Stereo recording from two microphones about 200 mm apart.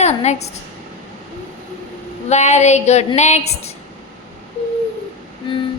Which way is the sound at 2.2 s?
35° left (ahead or behind).